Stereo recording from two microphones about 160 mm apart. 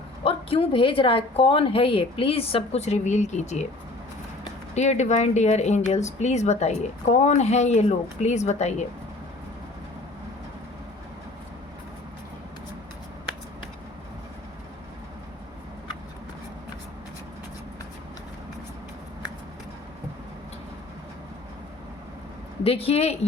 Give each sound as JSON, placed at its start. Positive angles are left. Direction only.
{"t": 0.3, "sound": "a woman's voice", "side_deg": 35}
{"t": 4.7, "sound": "speech", "side_deg": 45}
{"t": 22.6, "sound": "a woman's voice", "side_deg": 35}